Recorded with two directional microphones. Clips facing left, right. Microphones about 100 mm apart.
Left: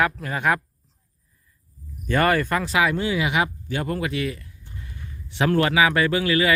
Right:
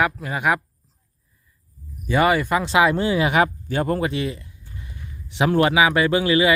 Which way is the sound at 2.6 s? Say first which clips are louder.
Right 4 dB; 25° right (ahead or behind).